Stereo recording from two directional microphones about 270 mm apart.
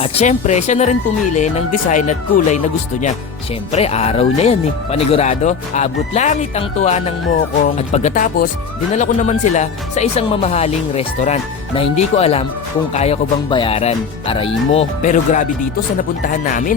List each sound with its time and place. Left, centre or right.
0.0 s speech: left
3.7 s speech: left